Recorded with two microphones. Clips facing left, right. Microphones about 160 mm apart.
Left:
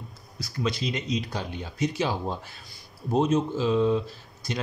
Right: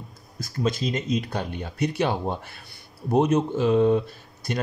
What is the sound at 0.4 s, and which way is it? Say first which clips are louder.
Speech: right 3 dB; 45° right (ahead or behind).